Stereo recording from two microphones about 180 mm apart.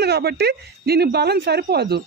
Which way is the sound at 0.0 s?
65° right (ahead or behind).